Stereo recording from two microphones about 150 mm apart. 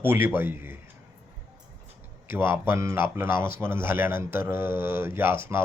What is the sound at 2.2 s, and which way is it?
Speech, 15° right (ahead or behind).